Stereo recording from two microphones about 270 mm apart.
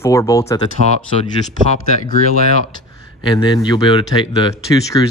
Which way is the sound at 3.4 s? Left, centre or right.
Centre.